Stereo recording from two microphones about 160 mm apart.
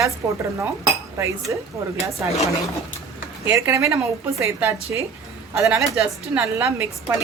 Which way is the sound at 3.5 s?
20° right (ahead or behind).